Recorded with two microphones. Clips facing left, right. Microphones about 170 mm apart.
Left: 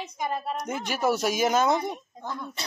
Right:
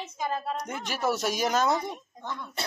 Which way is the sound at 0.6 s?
Centre (ahead or behind).